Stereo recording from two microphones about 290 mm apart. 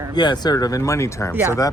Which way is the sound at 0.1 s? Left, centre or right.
Centre.